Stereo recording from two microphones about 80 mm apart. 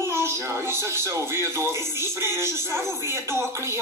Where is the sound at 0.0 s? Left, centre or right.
Right.